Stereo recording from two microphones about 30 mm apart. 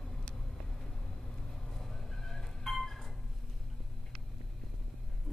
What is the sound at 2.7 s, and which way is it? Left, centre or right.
Cat, centre.